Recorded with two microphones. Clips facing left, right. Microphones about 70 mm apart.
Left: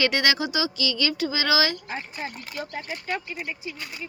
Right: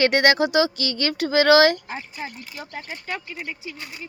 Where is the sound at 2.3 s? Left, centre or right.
Left.